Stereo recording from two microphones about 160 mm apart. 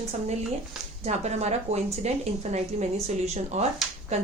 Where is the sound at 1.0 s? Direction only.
45° right (ahead or behind).